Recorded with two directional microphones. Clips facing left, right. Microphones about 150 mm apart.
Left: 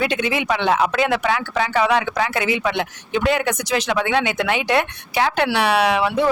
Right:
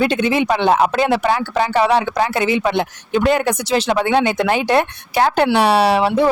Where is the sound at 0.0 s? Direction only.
30° right (ahead or behind).